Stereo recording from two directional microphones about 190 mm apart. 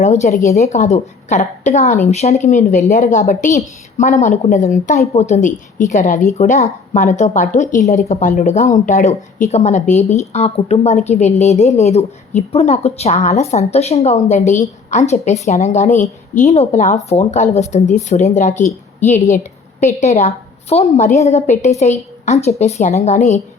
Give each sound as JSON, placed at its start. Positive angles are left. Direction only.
{"t": 0.0, "sound": "speech", "side_deg": 35}
{"t": 20.0, "sound": "speech", "side_deg": 35}